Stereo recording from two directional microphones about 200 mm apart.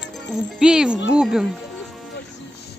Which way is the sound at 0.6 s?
5° right (ahead or behind).